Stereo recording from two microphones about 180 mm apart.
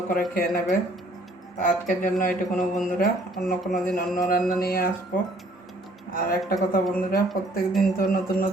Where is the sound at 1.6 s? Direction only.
45° left (ahead or behind).